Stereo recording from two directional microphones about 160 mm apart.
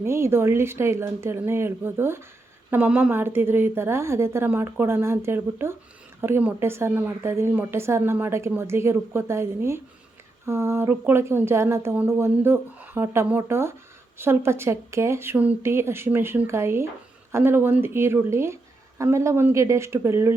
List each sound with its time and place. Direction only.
0.0 s speech: 15° right (ahead or behind)